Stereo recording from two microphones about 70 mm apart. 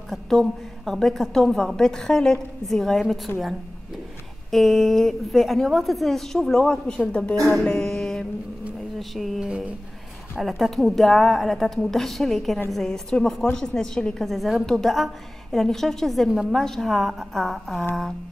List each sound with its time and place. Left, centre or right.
0.1 s a woman's voice: centre
4.5 s a woman's voice: centre
7.4 s music: centre
9.1 s a woman's voice: centre
10.6 s a woman's voice: centre